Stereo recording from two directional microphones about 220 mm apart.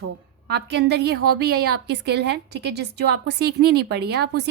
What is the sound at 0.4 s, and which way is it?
A woman's voice, 50° right (ahead or behind).